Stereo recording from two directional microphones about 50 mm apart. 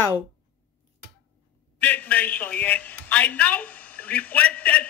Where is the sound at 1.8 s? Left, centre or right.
Left.